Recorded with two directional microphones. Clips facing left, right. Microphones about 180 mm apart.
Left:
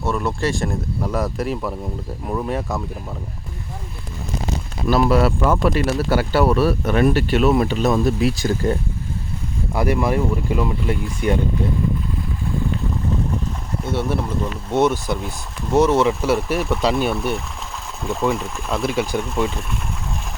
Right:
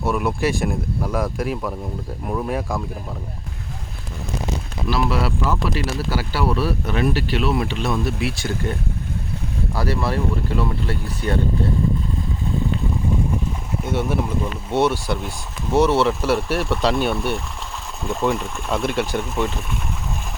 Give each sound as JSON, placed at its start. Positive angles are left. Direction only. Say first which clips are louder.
{"t": 0.0, "sound": "speech", "louder": "right 1 dB", "side_deg": -10}
{"t": 4.9, "sound": "speech", "louder": "left 6 dB", "side_deg": 45}
{"t": 9.7, "sound": "speech", "louder": "left 4 dB", "side_deg": 15}
{"t": 13.8, "sound": "speech", "louder": "even", "side_deg": -15}
{"t": 15.1, "sound": "speech", "louder": "left 1 dB", "side_deg": 5}